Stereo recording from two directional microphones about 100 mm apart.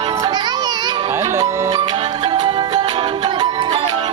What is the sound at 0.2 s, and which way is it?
Children playing, 45° right (ahead or behind).